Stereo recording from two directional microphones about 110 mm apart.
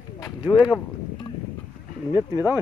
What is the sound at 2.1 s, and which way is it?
Speech, 35° left (ahead or behind).